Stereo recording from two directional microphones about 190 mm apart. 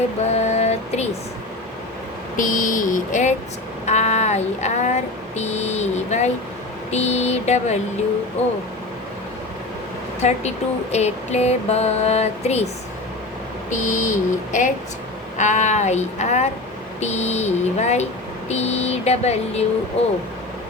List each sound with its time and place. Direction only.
0.3 s a sound: 35° left (ahead or behind)
2.3 s speech: 45° left (ahead or behind)
10.2 s speech: 35° left (ahead or behind)
13.7 s speech: 40° left (ahead or behind)